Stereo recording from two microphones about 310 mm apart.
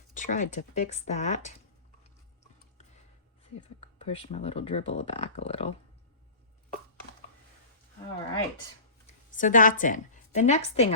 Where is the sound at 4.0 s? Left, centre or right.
Centre.